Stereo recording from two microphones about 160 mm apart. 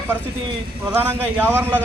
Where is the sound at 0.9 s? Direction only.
15° right (ahead or behind).